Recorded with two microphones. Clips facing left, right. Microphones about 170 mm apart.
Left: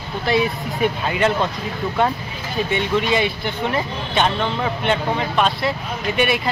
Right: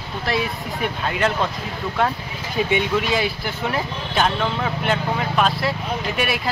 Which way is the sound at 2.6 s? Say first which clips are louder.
Even; 10° right (ahead or behind).